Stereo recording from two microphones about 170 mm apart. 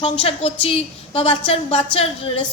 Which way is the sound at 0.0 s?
35° left (ahead or behind).